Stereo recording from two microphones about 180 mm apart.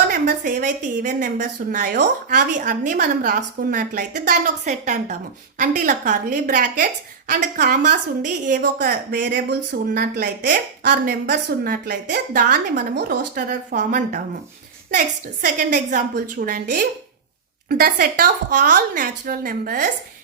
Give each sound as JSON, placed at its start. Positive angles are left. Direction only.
{"t": 0.1, "sound": "a woman's voice", "side_deg": -50}